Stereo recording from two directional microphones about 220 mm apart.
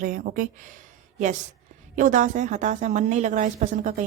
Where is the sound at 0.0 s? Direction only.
40° right (ahead or behind).